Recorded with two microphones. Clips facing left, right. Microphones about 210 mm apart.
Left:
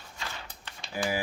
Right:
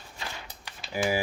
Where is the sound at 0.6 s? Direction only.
15° right (ahead or behind).